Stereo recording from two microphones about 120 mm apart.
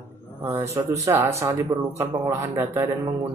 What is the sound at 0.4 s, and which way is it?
Speech, 25° right (ahead or behind).